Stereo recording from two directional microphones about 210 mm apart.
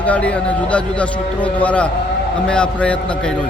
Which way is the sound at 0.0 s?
5° left (ahead or behind).